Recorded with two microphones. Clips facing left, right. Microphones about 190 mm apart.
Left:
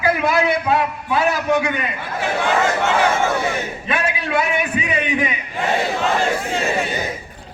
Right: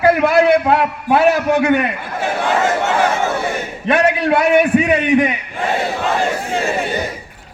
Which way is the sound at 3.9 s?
60° right (ahead or behind).